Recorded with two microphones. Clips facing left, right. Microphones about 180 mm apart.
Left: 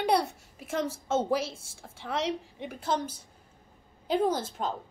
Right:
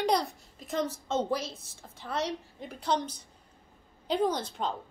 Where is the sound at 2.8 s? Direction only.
5° left (ahead or behind).